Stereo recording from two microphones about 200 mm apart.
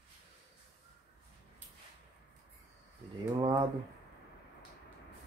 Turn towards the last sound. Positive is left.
turn(degrees=-20)  # may be behind; listen again after turning